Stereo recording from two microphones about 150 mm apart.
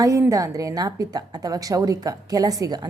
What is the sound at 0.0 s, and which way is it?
A woman's voice, 20° right (ahead or behind).